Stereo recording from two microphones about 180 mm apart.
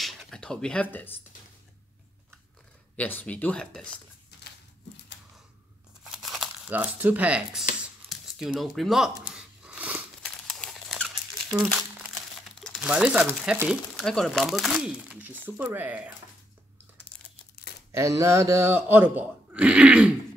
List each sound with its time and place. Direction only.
0.0 s a sound: 5° left (ahead or behind)
0.9 s speech: 10° left (ahead or behind)
3.0 s speech: 10° left (ahead or behind)
6.0 s crumpling: centre (ahead or behind)
8.0 s tearing: 35° right (ahead or behind)
8.4 s crunch: centre (ahead or behind)
10.2 s crumpling: 5° left (ahead or behind)
12.4 s crumpling: centre (ahead or behind)
13.5 s speech: 5° right (ahead or behind)
17.9 s speech: 15° right (ahead or behind)